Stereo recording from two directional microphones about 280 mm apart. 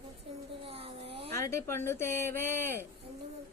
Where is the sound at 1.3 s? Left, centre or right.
Centre.